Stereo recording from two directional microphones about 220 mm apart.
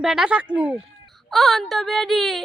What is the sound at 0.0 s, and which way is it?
Speech, 5° right (ahead or behind).